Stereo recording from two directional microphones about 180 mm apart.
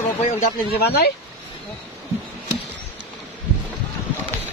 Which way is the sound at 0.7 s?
65° left (ahead or behind).